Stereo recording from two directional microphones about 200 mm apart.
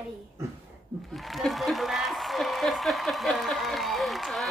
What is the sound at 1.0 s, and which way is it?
A woman's voice, centre (ahead or behind).